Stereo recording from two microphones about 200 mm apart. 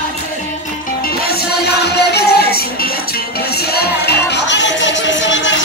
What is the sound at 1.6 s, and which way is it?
Music, 55° left (ahead or behind).